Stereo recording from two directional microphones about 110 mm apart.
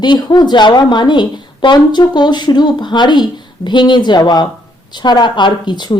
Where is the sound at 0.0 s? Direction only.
40° left (ahead or behind).